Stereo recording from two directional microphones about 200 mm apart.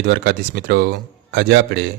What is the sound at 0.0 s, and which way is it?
A man's voice, 60° right (ahead or behind).